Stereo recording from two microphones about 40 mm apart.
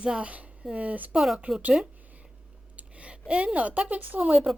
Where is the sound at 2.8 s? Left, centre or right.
Right.